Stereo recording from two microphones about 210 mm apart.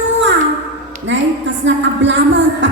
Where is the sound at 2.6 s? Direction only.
60° right (ahead or behind).